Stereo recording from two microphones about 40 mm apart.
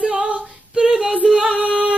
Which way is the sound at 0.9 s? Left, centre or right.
Centre.